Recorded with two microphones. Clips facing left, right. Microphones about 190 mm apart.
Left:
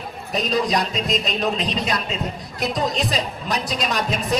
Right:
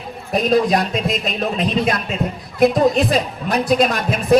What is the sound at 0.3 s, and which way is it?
A man's voice, 55° right (ahead or behind).